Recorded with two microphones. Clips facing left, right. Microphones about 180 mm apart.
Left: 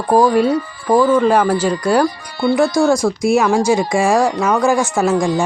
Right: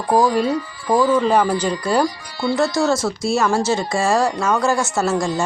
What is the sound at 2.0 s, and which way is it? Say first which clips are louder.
Speech: left 5 dB; 55° left (ahead or behind).